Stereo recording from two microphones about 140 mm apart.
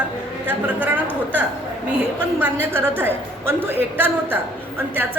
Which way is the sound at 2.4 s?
15° right (ahead or behind).